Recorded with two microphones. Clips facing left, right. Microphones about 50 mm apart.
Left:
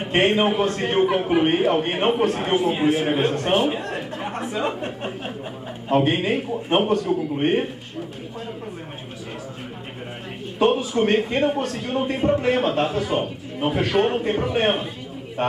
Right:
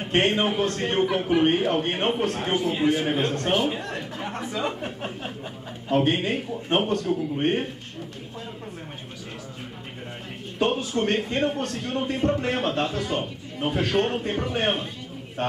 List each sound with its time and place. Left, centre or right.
0.0 s a man's voice: centre
6.9 s a man's voice: left
7.3 s a man's voice: centre
10.6 s a man's voice: centre